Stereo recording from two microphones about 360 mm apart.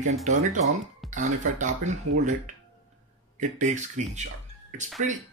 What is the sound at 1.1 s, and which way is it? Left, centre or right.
Speech, centre.